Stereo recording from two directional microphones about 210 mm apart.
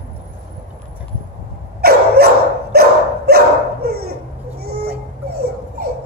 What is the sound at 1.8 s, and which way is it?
Dog, 50° right (ahead or behind).